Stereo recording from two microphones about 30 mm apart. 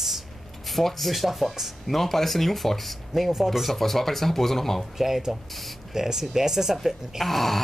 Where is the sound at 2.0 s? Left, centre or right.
Centre.